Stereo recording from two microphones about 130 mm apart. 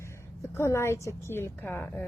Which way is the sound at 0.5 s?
20° left (ahead or behind).